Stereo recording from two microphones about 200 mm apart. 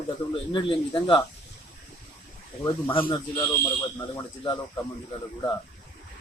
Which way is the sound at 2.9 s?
25° left (ahead or behind).